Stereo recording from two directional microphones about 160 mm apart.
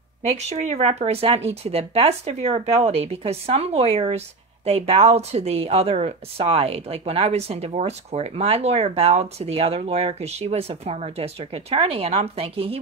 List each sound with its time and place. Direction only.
0.5 s speech: 40° right (ahead or behind)